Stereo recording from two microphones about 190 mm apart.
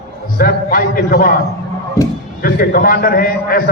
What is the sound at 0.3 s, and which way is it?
A man's voice, 50° left (ahead or behind).